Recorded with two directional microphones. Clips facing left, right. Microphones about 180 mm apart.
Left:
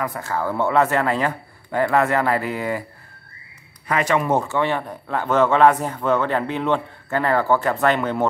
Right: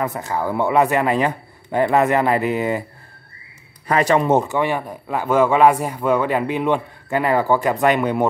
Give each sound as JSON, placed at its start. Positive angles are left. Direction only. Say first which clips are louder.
{"t": 0.0, "sound": "a man's voice", "louder": "right 2 dB", "side_deg": -20}
{"t": 3.8, "sound": "speech", "louder": "right 4 dB", "side_deg": -35}
{"t": 4.3, "sound": "speech", "louder": "right 3 dB", "side_deg": -20}